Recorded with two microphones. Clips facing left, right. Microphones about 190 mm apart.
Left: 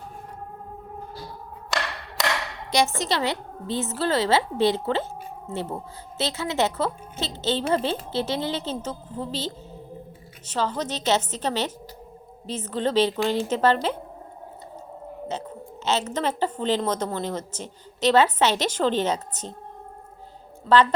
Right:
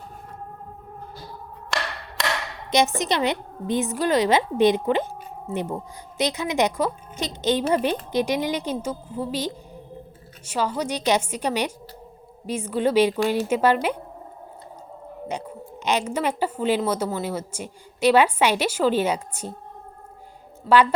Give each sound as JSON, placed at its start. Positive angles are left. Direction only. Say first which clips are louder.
{"t": 2.7, "sound": "a woman's voice", "louder": "right 2 dB", "side_deg": -20}
{"t": 15.3, "sound": "a woman's voice", "louder": "right 2 dB", "side_deg": -15}
{"t": 20.7, "sound": "a woman's voice", "louder": "right 1 dB", "side_deg": -10}